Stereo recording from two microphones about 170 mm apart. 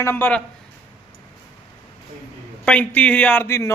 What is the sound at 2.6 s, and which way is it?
A man's voice, 5° left (ahead or behind).